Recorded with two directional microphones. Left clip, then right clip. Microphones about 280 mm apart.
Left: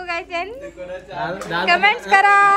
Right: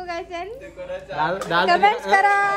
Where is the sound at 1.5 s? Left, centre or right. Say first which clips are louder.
Left 2 dB; centre.